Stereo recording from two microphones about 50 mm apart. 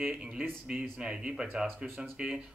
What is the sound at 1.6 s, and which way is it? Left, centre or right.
Speech, right.